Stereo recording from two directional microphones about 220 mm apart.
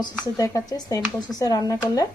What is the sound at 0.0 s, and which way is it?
A woman's voice, 15° left (ahead or behind).